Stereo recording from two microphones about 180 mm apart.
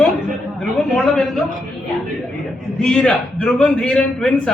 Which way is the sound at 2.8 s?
5° left (ahead or behind).